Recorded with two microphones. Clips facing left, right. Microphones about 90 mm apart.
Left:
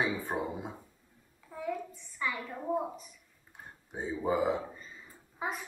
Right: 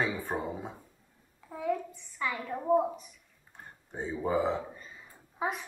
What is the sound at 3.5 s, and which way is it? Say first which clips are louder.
Speech: even; 10° left (ahead or behind).